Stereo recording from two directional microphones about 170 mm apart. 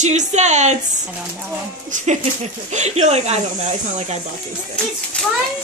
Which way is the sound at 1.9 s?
45° right (ahead or behind).